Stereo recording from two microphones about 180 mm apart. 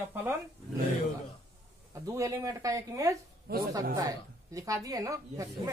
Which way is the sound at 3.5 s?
60° right (ahead or behind).